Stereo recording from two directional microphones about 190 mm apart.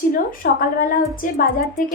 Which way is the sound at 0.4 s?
50° left (ahead or behind).